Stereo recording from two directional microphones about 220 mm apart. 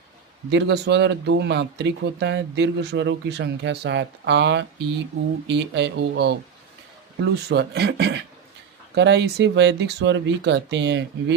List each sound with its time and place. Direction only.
0.5 s speech: 50° right (ahead or behind)